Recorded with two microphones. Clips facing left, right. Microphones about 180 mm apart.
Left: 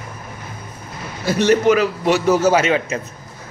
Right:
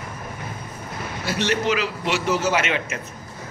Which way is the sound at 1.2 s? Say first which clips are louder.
Left 9 dB; 45° left (ahead or behind).